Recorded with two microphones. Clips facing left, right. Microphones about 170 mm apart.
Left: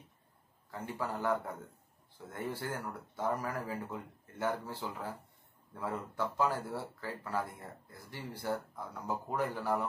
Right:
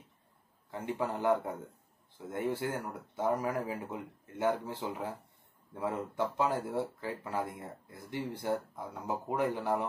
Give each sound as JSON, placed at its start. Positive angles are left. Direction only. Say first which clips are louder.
{"t": 0.7, "sound": "speech", "louder": "right 4 dB", "side_deg": -20}